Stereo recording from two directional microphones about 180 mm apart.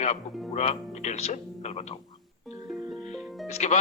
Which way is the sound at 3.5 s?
40° left (ahead or behind).